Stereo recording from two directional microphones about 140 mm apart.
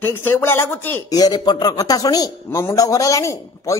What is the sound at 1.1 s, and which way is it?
Speech, 30° left (ahead or behind).